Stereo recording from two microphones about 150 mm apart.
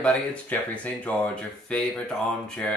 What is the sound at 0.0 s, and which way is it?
Speech, 10° left (ahead or behind).